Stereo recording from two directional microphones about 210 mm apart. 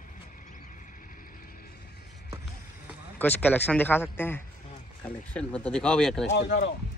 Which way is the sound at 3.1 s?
10° left (ahead or behind).